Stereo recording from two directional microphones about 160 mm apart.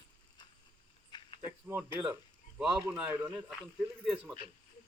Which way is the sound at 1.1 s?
30° left (ahead or behind).